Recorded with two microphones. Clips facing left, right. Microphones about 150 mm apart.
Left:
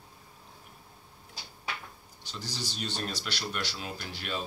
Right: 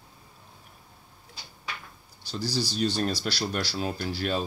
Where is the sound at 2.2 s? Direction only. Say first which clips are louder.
Right 9 dB; 35° right (ahead or behind).